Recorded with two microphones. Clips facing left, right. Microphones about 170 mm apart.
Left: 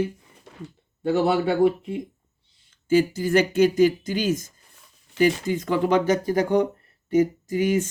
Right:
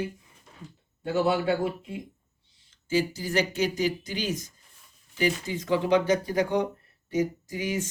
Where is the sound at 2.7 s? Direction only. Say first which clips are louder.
Left 7 dB; 50° left (ahead or behind).